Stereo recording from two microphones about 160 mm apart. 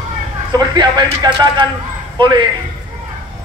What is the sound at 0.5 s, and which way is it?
A man's voice, 25° right (ahead or behind).